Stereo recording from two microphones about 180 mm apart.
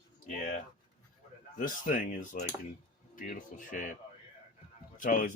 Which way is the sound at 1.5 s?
50° left (ahead or behind).